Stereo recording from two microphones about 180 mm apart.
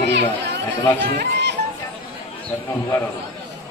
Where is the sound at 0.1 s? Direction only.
75° right (ahead or behind).